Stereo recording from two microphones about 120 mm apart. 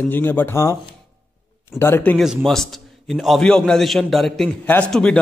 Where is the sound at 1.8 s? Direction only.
15° left (ahead or behind).